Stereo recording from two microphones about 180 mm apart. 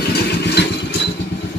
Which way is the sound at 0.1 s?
65° left (ahead or behind).